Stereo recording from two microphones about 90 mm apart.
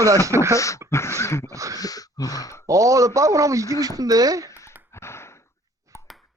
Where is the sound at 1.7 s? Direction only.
45° left (ahead or behind).